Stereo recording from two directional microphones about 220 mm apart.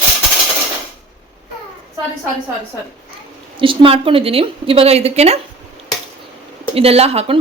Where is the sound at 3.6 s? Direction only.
25° right (ahead or behind).